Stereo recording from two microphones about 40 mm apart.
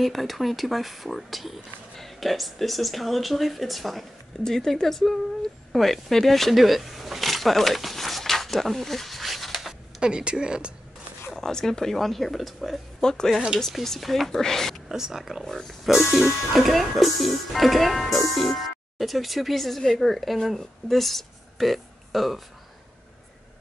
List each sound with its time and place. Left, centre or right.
0.0 s speech: centre
4.5 s speech: centre
5.7 s a sound: centre
10.0 s a woman's voice: right
11.3 s speech: centre
13.0 s speech: centre
14.9 s speech: centre
15.4 s speech: centre
15.8 s speech: centre